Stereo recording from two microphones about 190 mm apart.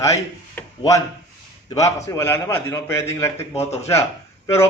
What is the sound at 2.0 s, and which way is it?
A man's voice, 15° left (ahead or behind).